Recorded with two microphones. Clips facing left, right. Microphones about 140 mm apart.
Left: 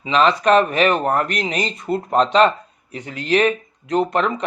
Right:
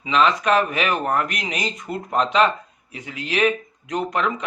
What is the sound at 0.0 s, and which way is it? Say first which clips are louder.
Speech: left 3 dB; 35° left (ahead or behind).